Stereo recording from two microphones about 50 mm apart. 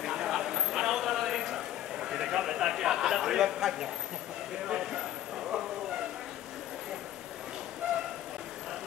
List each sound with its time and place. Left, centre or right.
0.0 s a sound: centre
4.6 s speech: centre
5.5 s bow-wow: centre